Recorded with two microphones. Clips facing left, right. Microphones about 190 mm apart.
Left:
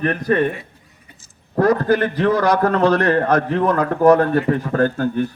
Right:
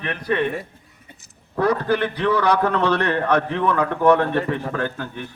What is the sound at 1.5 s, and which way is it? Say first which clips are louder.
Speech: left 4 dB; 45° left (ahead or behind).